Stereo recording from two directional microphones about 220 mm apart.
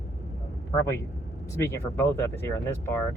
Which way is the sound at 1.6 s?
10° left (ahead or behind).